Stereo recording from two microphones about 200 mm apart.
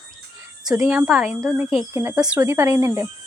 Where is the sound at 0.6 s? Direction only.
15° right (ahead or behind).